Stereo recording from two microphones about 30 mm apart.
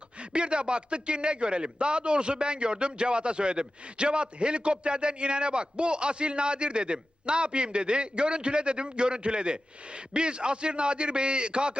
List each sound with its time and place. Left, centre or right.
0.3 s a man's voice: right